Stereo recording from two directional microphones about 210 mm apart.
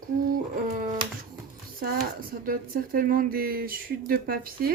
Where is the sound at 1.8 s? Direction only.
45° right (ahead or behind).